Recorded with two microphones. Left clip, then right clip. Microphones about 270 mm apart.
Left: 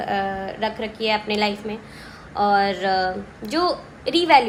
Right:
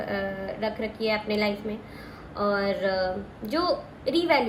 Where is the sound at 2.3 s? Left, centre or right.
Left.